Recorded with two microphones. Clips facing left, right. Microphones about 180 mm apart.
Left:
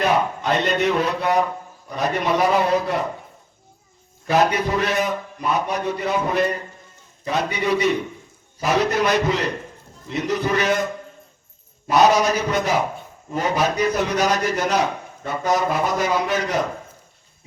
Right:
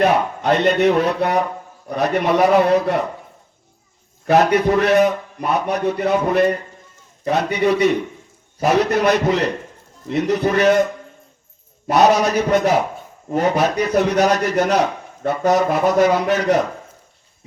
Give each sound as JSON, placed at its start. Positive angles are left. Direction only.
{"t": 0.0, "sound": "a man's voice", "side_deg": -60}
{"t": 4.3, "sound": "a man's voice", "side_deg": -60}
{"t": 11.9, "sound": "a man's voice", "side_deg": -60}